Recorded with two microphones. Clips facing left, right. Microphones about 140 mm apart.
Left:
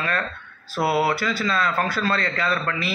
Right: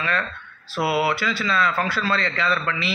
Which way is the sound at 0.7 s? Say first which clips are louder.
Left 1 dB; 45° left (ahead or behind).